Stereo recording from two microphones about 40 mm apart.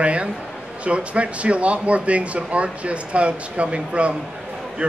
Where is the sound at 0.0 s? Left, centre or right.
Right.